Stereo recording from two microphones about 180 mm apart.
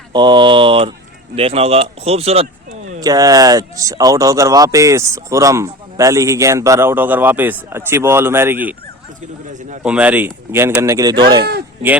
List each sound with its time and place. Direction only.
0.1 s speech: 25° right (ahead or behind)
3.0 s speech: 20° right (ahead or behind)
9.5 s a man's voice: 45° right (ahead or behind)
9.8 s speech: 5° right (ahead or behind)